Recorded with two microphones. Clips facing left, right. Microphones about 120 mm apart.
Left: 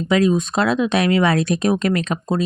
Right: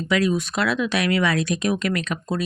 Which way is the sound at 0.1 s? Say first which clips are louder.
Left 5 dB; 25° left (ahead or behind).